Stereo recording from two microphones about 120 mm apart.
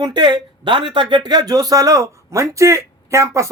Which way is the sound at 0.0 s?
40° right (ahead or behind).